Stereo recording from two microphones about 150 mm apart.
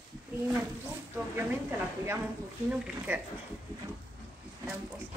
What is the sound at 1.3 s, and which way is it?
A woman's voice, 15° right (ahead or behind).